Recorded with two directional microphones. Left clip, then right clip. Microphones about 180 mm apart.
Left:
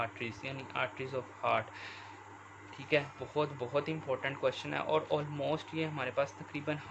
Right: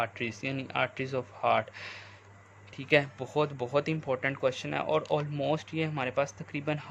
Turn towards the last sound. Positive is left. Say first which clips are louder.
# right 4 dB
turn(degrees=-25)  # may be behind; listen again after turning